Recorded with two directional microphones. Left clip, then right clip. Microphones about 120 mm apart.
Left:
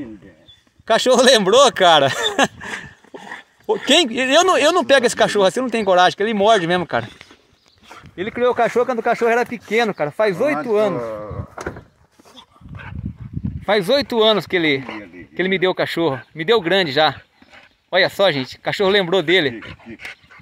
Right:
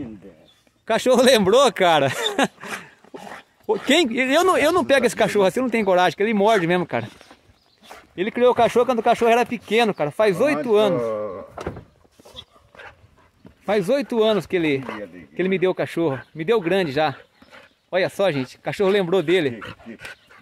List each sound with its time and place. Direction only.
0.8 s speech: 15° right (ahead or behind)
2.3 s a sound: 10° right (ahead or behind)
3.2 s dog: 40° right (ahead or behind)
3.8 s speech: 15° right (ahead or behind)
8.3 s speech: 40° right (ahead or behind)
8.6 s speech: 15° right (ahead or behind)
13.7 s speech: 15° right (ahead or behind)
14.1 s speech: 5° right (ahead or behind)